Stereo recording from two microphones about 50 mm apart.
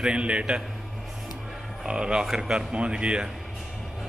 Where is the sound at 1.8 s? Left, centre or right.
Centre.